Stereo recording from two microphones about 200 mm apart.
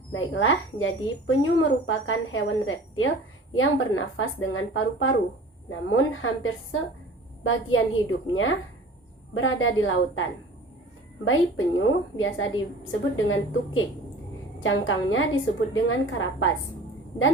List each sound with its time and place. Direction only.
0.1 s a woman's voice: 80° left
5.9 s a woman's voice: 90° left
11.3 s a woman's voice: 85° left